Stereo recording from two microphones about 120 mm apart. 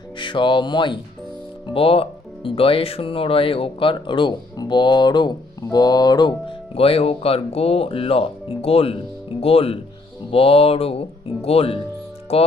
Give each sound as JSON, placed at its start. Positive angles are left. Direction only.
{"t": 0.2, "sound": "speech", "side_deg": 45}
{"t": 1.6, "sound": "speech", "side_deg": 50}